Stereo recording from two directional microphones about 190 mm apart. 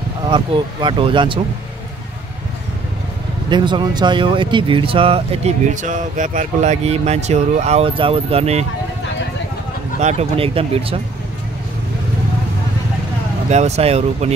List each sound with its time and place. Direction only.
0.3 s speech: 25° right (ahead or behind)
3.4 s speech: 25° right (ahead or behind)
9.9 s speech: 35° right (ahead or behind)
13.5 s speech: 35° right (ahead or behind)